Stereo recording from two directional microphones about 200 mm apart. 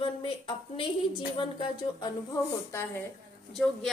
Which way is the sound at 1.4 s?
25° left (ahead or behind).